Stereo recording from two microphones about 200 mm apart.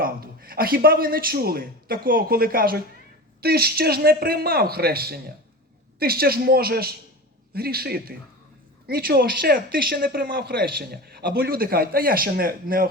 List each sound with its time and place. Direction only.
0.0 s speech: 45° right (ahead or behind)